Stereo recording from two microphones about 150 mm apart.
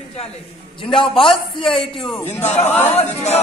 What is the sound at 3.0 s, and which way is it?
Chant, 45° left (ahead or behind).